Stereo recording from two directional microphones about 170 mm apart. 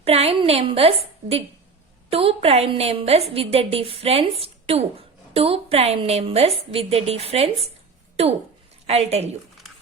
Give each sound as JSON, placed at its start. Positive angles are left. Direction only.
{"t": 0.0, "sound": "a woman's voice", "side_deg": -35}